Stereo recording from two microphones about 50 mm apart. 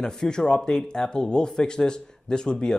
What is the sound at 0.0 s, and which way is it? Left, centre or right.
Speech, centre.